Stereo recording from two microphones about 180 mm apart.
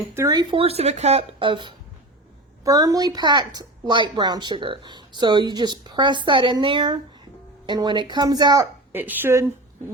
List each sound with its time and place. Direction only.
0.1 s a woman's voice: 20° right (ahead or behind)
8.9 s a woman's voice: 10° right (ahead or behind)